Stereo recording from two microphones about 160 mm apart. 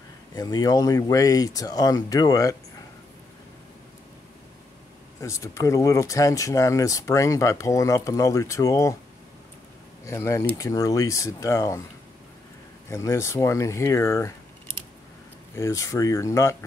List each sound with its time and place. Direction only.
0.3 s speech: 25° left (ahead or behind)
5.2 s speech: 20° left (ahead or behind)
10.0 s speech: 20° left (ahead or behind)
12.9 s speech: 20° left (ahead or behind)
15.5 s speech: 20° left (ahead or behind)